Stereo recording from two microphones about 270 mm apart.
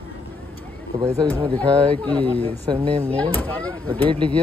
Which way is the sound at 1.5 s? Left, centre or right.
Centre.